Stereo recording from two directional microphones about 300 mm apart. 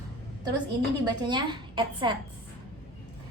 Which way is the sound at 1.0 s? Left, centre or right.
Centre.